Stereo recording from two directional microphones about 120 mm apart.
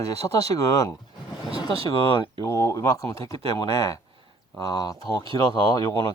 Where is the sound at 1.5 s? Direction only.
50° right (ahead or behind).